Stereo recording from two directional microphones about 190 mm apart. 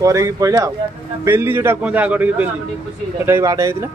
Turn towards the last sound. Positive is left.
turn(degrees=-15)  # may be behind; listen again after turning